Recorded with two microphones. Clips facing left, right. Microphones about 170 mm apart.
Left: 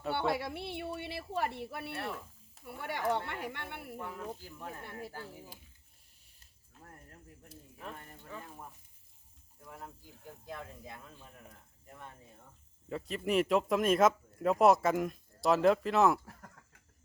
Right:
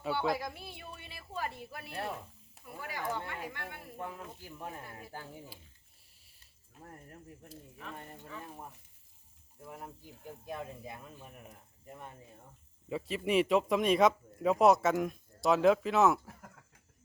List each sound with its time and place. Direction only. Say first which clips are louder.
0.1 s speech: even; 65° left (ahead or behind)
3.9 s speech: left 2 dB; 15° right (ahead or behind)
6.7 s speech: right 4 dB; 20° right (ahead or behind)
9.6 s speech: right 2 dB; 20° right (ahead or behind)
12.9 s speech: right 1 dB; 5° right (ahead or behind)